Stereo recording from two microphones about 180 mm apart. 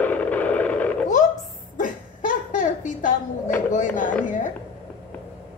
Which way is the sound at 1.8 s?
45° left (ahead or behind).